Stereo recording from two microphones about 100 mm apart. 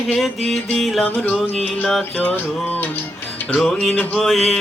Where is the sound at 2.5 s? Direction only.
10° left (ahead or behind).